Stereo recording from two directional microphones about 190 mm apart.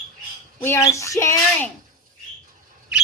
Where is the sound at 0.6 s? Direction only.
10° left (ahead or behind).